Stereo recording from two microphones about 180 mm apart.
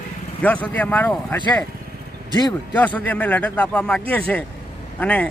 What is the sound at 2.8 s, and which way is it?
A man's voice, 10° left (ahead or behind).